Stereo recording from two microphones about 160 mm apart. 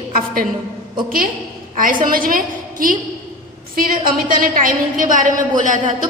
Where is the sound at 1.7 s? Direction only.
60° right (ahead or behind).